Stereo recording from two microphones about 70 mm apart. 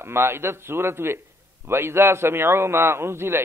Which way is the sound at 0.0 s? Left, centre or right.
Right.